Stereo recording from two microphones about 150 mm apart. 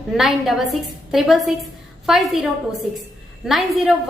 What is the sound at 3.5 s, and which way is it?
Speech, centre (ahead or behind).